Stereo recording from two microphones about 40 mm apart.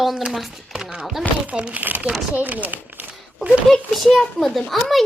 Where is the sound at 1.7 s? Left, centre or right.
Right.